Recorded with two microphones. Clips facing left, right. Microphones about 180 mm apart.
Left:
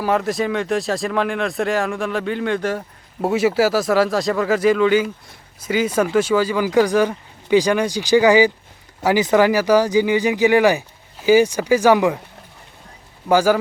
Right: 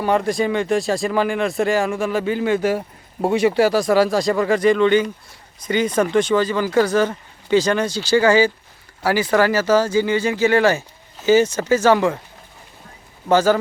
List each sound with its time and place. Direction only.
0.0 s speech: centre (ahead or behind)
13.3 s speech: 10° left (ahead or behind)